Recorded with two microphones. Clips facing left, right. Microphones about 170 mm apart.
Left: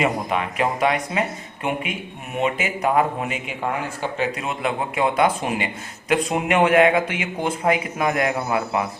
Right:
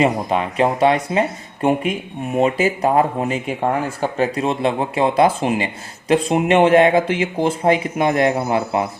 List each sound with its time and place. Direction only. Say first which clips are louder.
0.0 s speech: right 5 dB; 30° right (ahead or behind)